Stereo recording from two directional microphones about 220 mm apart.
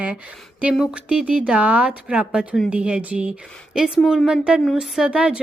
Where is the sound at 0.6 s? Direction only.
5° right (ahead or behind).